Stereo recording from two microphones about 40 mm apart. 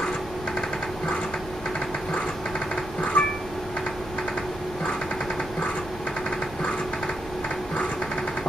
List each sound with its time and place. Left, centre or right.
2.7 s music: left